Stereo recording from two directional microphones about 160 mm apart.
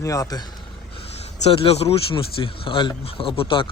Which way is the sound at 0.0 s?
20° left (ahead or behind).